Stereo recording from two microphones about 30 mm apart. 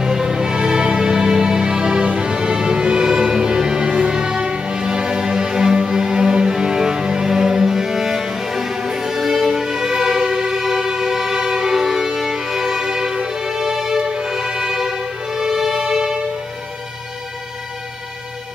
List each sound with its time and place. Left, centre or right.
0.0 s music: centre
12.4 s music: centre